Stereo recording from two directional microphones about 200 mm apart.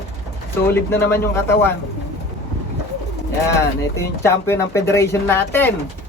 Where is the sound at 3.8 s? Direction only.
15° left (ahead or behind).